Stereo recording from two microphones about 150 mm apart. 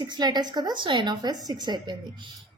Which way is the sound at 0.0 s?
30° right (ahead or behind).